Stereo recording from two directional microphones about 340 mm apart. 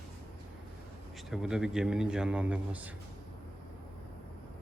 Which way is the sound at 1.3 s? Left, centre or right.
Centre.